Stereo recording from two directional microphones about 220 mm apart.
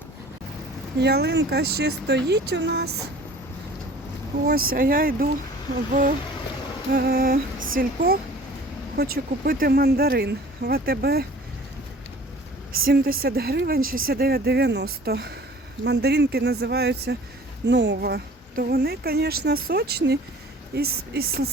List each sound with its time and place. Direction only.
0.9 s speech: 50° right (ahead or behind)
4.7 s speech: 40° right (ahead or behind)
12.8 s speech: 40° right (ahead or behind)